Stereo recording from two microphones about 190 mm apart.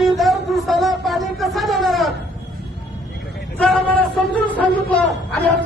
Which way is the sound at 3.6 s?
5° left (ahead or behind).